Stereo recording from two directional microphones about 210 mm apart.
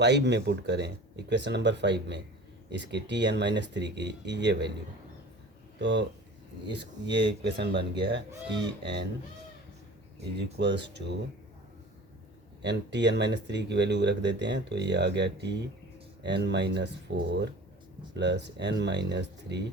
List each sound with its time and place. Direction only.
0.0 s speech: 55° right (ahead or behind)
5.8 s speech: 55° right (ahead or behind)
10.2 s speech: 55° right (ahead or behind)
12.6 s speech: 55° right (ahead or behind)